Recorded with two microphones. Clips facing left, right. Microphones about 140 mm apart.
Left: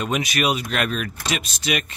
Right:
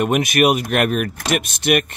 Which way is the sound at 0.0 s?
50° right (ahead or behind).